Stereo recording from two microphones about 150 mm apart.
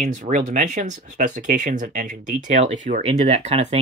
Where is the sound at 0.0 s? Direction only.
55° right (ahead or behind).